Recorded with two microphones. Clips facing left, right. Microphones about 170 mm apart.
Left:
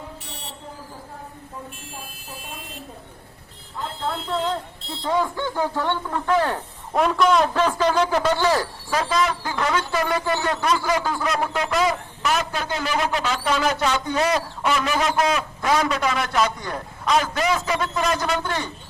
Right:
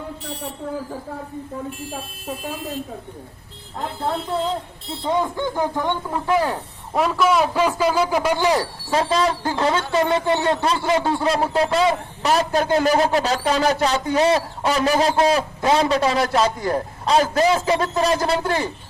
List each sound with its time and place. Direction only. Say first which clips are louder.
5.0 s a man's voice: right 1 dB; 20° right (ahead or behind)